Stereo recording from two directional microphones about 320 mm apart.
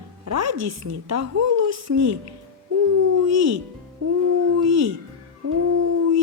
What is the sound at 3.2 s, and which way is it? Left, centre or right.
Speech, right.